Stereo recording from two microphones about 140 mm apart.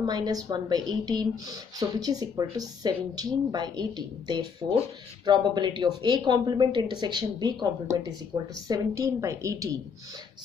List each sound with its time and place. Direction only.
0.0 s speech: 25° right (ahead or behind)
8.3 s speech: 20° right (ahead or behind)